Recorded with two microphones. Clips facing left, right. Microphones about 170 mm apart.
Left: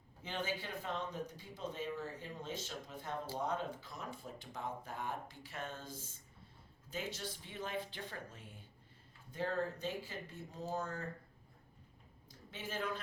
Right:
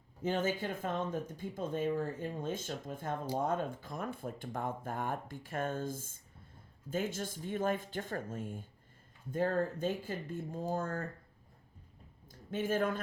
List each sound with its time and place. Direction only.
0.2 s speech: 45° right (ahead or behind)
12.3 s speech: 50° right (ahead or behind)